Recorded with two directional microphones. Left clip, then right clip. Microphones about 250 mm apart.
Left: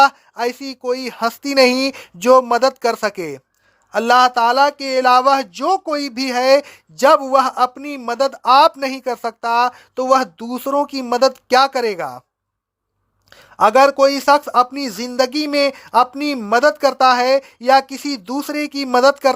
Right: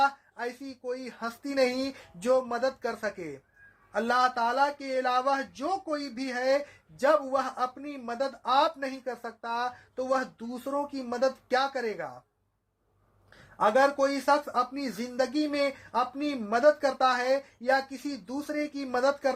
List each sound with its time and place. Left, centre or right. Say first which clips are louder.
0.0 s speech: left 14 dB; left
13.6 s speech: left 12 dB; left